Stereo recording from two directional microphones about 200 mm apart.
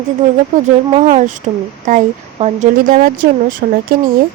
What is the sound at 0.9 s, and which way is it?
Speech, 35° right (ahead or behind).